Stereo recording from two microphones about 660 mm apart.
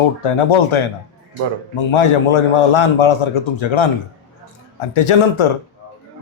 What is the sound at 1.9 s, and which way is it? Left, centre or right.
A man's voice, left.